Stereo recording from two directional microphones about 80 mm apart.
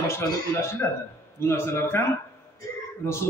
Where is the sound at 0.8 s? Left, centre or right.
Left.